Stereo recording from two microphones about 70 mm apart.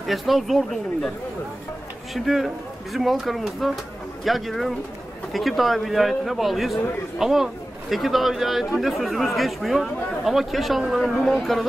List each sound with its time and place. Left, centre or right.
0.0 s a man's voice: centre
2.1 s a man's voice: centre